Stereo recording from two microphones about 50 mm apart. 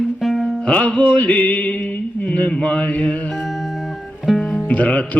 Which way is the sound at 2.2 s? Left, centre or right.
Left.